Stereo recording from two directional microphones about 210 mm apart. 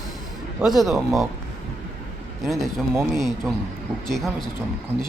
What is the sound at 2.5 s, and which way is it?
Speech, centre (ahead or behind).